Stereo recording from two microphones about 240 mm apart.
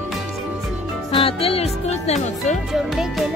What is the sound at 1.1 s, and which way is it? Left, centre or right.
Speech, left.